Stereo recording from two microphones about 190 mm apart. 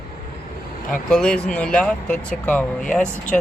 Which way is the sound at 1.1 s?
5° left (ahead or behind).